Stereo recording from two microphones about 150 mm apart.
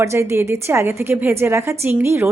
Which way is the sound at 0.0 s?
20° right (ahead or behind).